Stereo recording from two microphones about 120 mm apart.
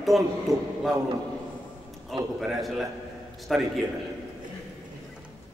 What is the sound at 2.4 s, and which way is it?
A man's voice, centre (ahead or behind).